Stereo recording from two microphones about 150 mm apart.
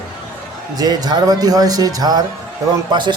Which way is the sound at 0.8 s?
25° right (ahead or behind).